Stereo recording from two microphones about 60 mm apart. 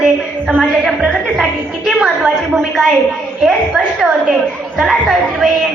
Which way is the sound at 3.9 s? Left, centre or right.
Centre.